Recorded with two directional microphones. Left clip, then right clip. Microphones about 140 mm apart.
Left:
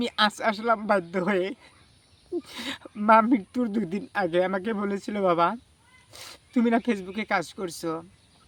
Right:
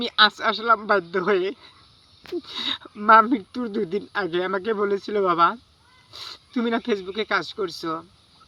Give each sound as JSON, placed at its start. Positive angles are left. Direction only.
{"t": 0.0, "sound": "speech", "side_deg": 45}